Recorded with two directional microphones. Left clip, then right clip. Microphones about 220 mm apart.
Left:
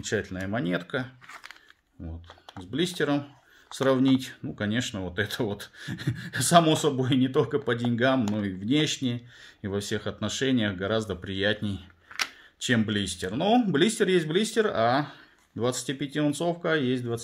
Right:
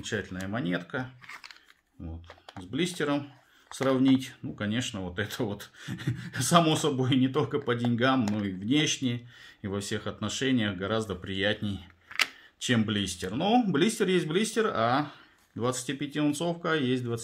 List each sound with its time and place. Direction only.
0.0 s speech: 30° left (ahead or behind)
2.6 s speech: 25° left (ahead or behind)